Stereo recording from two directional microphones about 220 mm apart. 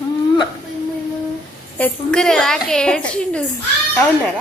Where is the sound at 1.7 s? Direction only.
5° left (ahead or behind).